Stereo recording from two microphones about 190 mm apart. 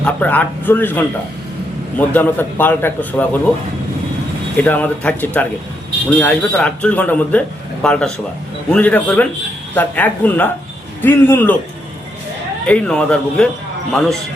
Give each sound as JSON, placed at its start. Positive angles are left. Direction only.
{"t": 0.0, "sound": "speech", "side_deg": 10}
{"t": 4.5, "sound": "speech", "side_deg": 10}
{"t": 12.6, "sound": "a man's voice", "side_deg": 5}